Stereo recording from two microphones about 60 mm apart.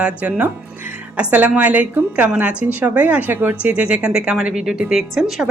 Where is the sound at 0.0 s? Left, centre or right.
Right.